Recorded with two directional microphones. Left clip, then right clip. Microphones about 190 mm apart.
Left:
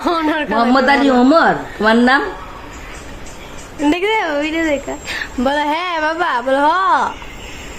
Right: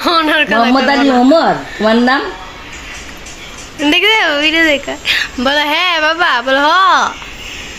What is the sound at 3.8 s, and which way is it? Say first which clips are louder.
A woman's voice: right 6 dB; 5° left (ahead or behind).